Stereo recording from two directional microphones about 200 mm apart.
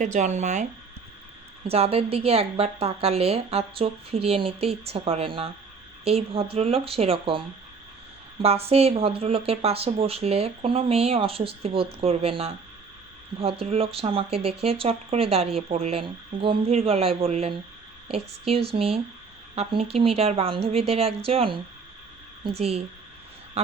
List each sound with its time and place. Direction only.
0.0 s speech: 35° right (ahead or behind)